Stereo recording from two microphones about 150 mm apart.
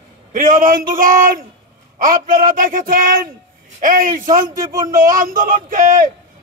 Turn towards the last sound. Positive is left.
turn(degrees=-65)  # may be behind; listen again after turning